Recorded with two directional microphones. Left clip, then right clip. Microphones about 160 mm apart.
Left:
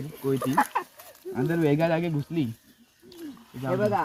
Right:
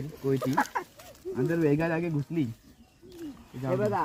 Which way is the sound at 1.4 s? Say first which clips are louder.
Left 2 dB; 30° left (ahead or behind).